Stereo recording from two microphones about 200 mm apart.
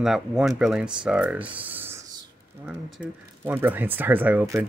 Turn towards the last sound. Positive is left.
turn(degrees=-10)  # may be behind; listen again after turning